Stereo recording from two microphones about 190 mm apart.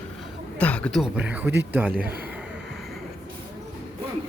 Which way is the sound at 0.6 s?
5° left (ahead or behind).